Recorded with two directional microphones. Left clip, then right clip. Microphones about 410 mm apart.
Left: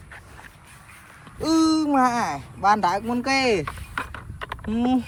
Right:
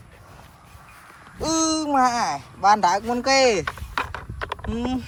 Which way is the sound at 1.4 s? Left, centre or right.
Centre.